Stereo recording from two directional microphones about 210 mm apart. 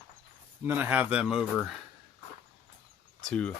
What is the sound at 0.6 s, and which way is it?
Speech, 10° right (ahead or behind).